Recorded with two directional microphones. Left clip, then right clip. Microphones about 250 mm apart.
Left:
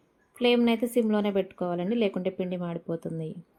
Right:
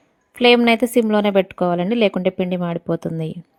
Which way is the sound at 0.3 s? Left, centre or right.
Right.